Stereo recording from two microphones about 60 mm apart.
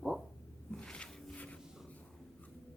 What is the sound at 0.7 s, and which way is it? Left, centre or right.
Music, centre.